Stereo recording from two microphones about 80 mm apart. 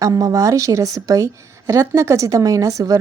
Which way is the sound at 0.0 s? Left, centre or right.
Right.